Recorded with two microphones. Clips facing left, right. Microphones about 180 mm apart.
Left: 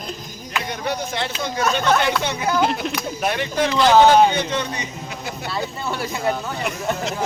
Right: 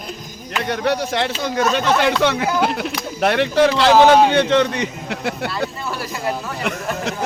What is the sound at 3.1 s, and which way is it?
A man's voice, 70° right (ahead or behind).